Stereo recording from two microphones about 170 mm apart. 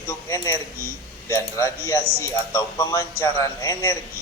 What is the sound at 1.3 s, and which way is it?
A man's voice, 15° left (ahead or behind).